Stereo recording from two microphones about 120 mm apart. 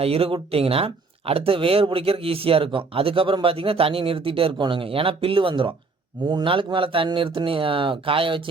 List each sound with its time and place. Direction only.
0.0 s speech: 55° right (ahead or behind)